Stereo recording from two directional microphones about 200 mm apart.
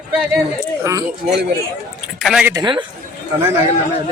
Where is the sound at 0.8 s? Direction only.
15° right (ahead or behind).